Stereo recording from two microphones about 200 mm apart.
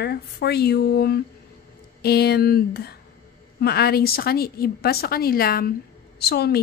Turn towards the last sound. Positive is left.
turn(degrees=55)  # may be behind; listen again after turning